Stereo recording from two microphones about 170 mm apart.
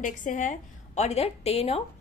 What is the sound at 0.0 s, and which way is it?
Speech, 50° left (ahead or behind).